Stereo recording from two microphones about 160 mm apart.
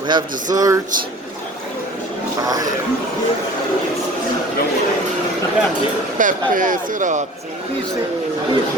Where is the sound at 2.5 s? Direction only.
25° right (ahead or behind).